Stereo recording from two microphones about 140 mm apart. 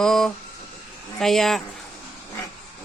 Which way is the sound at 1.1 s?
Centre (ahead or behind).